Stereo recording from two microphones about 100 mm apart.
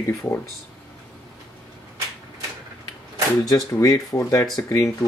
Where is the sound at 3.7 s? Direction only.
35° left (ahead or behind).